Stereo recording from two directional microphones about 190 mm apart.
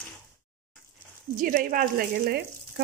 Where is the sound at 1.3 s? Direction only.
45° right (ahead or behind).